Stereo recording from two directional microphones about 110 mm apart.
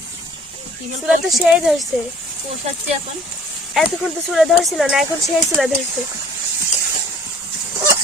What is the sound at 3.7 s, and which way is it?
Speech, centre (ahead or behind).